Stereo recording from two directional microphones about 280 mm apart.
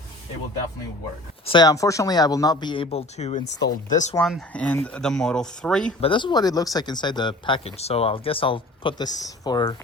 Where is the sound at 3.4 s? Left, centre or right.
Left.